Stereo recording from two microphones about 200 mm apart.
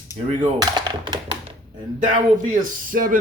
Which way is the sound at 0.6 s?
20° right (ahead or behind).